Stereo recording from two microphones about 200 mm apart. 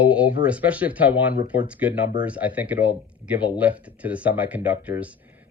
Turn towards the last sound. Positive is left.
turn(degrees=-5)  # may be behind; listen again after turning